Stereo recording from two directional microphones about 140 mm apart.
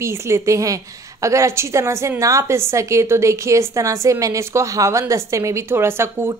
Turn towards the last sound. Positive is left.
turn(degrees=-20)  # may be behind; listen again after turning